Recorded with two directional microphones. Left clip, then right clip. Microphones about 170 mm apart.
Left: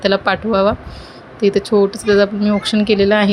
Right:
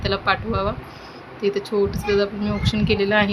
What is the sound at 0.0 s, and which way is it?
Speech, 40° left (ahead or behind).